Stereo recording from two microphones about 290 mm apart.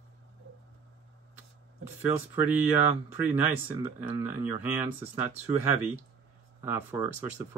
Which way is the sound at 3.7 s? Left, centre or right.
Centre.